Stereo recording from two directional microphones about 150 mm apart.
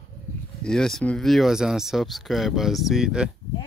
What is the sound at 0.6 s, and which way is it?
Speech, 5° left (ahead or behind).